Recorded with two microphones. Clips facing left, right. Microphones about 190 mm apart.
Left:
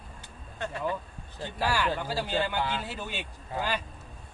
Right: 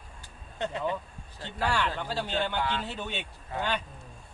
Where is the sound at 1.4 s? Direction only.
10° left (ahead or behind).